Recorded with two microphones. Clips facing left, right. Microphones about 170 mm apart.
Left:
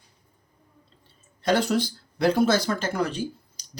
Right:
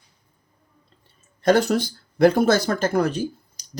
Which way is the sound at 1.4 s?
45° right (ahead or behind).